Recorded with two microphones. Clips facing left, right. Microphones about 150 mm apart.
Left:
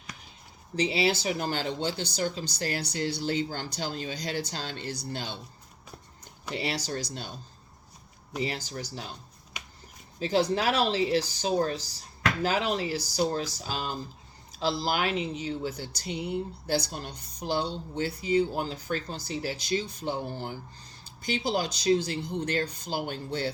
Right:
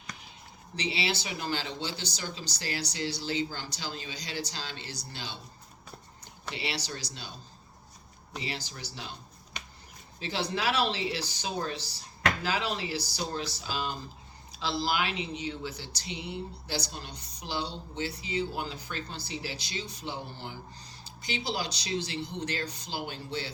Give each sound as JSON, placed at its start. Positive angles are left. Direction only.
{"t": 0.8, "sound": "speech", "side_deg": 45}
{"t": 6.5, "sound": "speech", "side_deg": 45}
{"t": 8.4, "sound": "speech", "side_deg": 45}
{"t": 10.2, "sound": "speech", "side_deg": 40}